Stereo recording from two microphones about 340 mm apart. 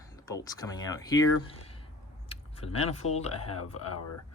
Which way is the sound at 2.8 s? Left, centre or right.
Centre.